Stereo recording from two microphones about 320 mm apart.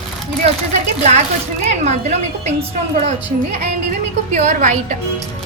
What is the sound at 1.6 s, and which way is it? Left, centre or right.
A woman's voice, right.